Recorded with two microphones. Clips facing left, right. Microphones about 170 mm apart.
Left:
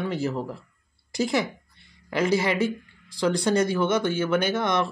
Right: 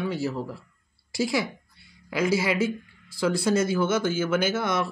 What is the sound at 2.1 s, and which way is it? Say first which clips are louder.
Speech: left 1 dB; 5° right (ahead or behind).